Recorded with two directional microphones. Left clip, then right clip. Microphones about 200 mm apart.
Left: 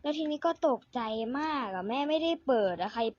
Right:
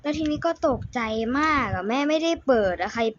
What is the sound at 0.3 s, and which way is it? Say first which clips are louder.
Speech: right 5 dB; 20° left (ahead or behind).